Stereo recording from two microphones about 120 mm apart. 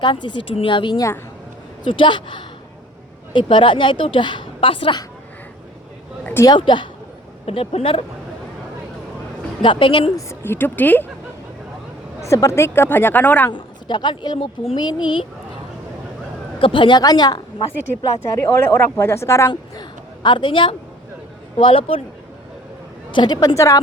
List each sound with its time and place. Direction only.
0.0 s a woman's voice: 40° left (ahead or behind)
6.6 s speech: 40° left (ahead or behind)
7.4 s a woman's voice: 55° left (ahead or behind)
9.6 s a woman's voice: 45° left (ahead or behind)
10.2 s speech: 20° left (ahead or behind)
12.2 s speech: 25° left (ahead or behind)
13.5 s speech: 40° left (ahead or behind)
14.8 s speech: 40° left (ahead or behind)
16.6 s speech: 45° left (ahead or behind)
18.2 s a woman's voice: 20° left (ahead or behind); by 22.0 s 50° left (ahead or behind)
23.1 s speech: 35° left (ahead or behind)